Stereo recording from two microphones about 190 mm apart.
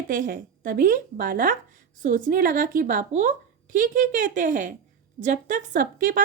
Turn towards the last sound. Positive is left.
turn(degrees=-45)  # may be behind; listen again after turning